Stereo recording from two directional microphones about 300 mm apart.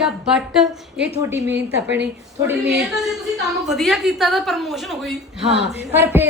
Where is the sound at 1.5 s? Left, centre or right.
Right.